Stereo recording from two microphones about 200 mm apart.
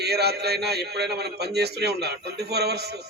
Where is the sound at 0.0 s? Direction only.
55° right (ahead or behind).